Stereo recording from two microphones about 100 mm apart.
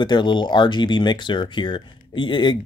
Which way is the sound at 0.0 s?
50° left (ahead or behind).